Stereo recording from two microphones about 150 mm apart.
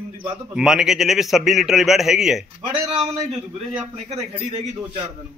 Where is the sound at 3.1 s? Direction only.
45° right (ahead or behind).